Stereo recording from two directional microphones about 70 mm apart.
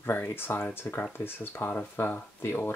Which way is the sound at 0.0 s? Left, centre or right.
Left.